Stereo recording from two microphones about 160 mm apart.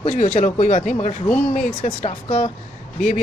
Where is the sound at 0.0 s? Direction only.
50° left (ahead or behind).